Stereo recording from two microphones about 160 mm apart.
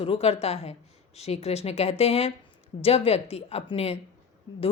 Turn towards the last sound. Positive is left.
turn(degrees=40)  # may be behind; listen again after turning